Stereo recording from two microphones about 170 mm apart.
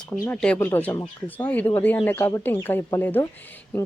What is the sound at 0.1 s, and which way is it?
A woman's voice, 10° left (ahead or behind).